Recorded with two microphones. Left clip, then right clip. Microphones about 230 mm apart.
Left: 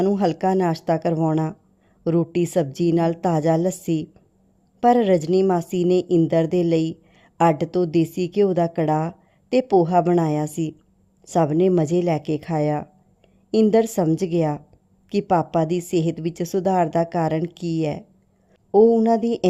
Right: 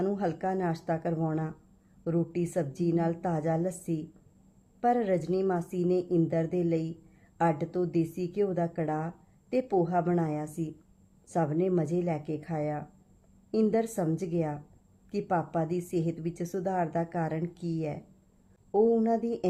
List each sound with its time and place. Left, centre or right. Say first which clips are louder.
0.0 s a woman's voice: left 10 dB; left